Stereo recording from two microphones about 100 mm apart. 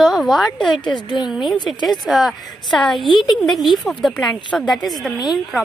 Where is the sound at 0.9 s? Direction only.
45° left (ahead or behind).